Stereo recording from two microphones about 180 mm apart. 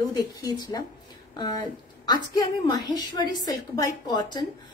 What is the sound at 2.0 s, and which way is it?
A woman's voice, 25° left (ahead or behind).